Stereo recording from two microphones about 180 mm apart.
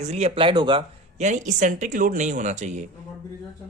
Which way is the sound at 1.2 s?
45° right (ahead or behind).